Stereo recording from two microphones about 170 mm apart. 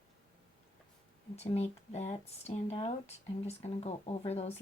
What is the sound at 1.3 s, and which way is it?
Speech, 40° left (ahead or behind).